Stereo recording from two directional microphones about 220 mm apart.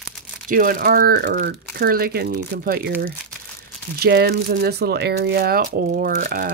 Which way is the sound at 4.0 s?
45° right (ahead or behind).